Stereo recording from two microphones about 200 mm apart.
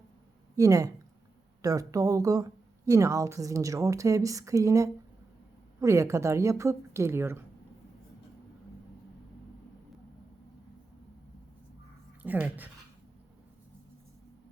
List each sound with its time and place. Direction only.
0.5 s a woman's voice: 15° right (ahead or behind)
12.2 s speech: 10° right (ahead or behind)